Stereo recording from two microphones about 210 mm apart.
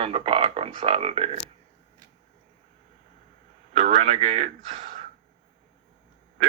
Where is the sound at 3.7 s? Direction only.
30° right (ahead or behind).